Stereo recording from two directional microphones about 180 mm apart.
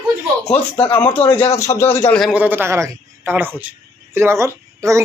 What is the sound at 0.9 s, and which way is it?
A man's voice, 10° left (ahead or behind).